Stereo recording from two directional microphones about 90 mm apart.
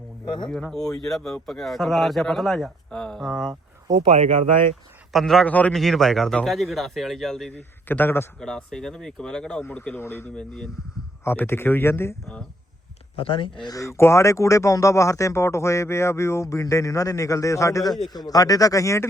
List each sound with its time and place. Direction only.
0.5 s a man's voice: 5° left (ahead or behind)
3.5 s a sound: 45° right (ahead or behind)
5.1 s a man's voice: 5° left (ahead or behind)
5.5 s speech: 15° left (ahead or behind)
5.7 s a man's voice: 5° left (ahead or behind)
7.9 s speech: 25° left (ahead or behind)
8.4 s speech: 5° left (ahead or behind); by 10.3 s 25° left (ahead or behind)
10.3 s a man's voice: 5° left (ahead or behind)
11.2 s speech: 25° left (ahead or behind)
13.1 s speech: 85° left
13.7 s speech: 35° left (ahead or behind)
18.1 s speech: 45° left (ahead or behind)